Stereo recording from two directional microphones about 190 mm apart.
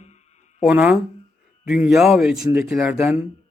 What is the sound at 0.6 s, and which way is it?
Speech, 5° right (ahead or behind).